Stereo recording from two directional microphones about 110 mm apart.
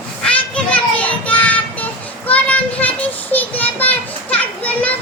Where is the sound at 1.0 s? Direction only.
15° left (ahead or behind).